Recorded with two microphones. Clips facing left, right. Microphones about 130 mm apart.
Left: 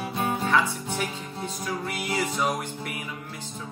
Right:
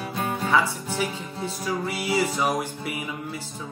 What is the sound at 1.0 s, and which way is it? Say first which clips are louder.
Music: right 6 dB; 5° right (ahead or behind).